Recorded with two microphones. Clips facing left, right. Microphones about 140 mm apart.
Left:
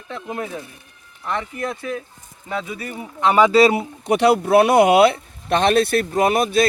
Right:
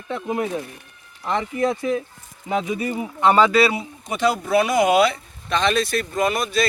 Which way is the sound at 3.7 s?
60° left (ahead or behind).